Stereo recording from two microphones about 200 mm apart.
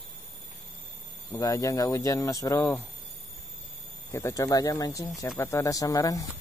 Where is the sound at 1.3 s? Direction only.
15° left (ahead or behind).